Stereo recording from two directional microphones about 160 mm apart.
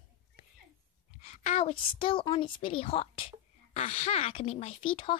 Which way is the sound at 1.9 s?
30° left (ahead or behind).